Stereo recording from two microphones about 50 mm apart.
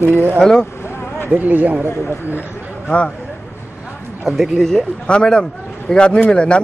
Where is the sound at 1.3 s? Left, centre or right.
Right.